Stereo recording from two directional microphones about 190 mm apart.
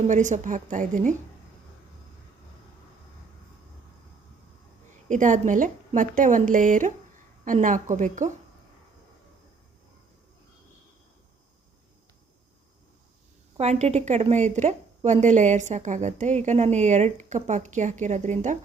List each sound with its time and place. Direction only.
0.1 s a woman's voice: 40° right (ahead or behind)
5.0 s a woman's voice: 40° right (ahead or behind)
13.6 s a woman's voice: 35° right (ahead or behind)